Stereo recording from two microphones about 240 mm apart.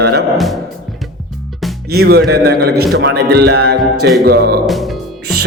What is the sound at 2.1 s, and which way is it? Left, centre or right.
A man's voice, right.